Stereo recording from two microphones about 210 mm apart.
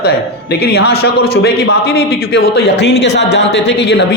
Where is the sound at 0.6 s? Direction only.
50° left (ahead or behind).